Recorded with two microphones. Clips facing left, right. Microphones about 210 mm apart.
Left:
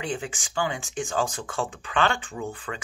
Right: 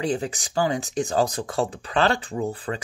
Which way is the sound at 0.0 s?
40° right (ahead or behind).